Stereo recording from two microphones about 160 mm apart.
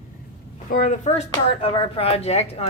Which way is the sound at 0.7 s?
55° left (ahead or behind).